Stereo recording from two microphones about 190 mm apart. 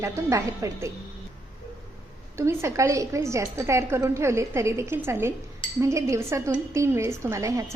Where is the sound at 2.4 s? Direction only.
15° right (ahead or behind).